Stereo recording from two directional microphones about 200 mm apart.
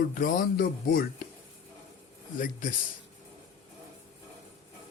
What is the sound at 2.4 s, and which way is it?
Speech, 40° left (ahead or behind).